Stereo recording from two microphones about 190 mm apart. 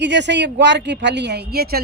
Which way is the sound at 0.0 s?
65° right (ahead or behind).